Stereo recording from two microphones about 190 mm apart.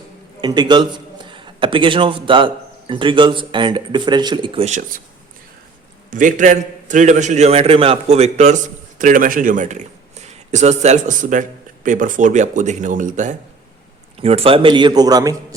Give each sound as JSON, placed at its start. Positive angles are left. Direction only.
{"t": 0.4, "sound": "a man's voice", "side_deg": -25}
{"t": 6.1, "sound": "a man's voice", "side_deg": -45}
{"t": 14.2, "sound": "a man's voice", "side_deg": -30}